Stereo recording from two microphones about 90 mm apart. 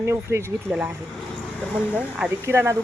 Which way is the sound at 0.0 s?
30° right (ahead or behind).